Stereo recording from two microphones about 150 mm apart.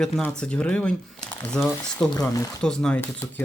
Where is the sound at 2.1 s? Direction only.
20° left (ahead or behind).